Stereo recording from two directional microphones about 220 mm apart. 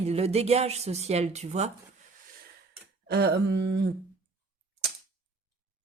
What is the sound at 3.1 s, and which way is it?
Speech, 50° right (ahead or behind).